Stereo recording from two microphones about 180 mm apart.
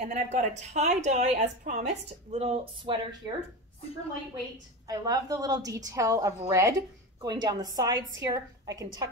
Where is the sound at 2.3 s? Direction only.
35° right (ahead or behind).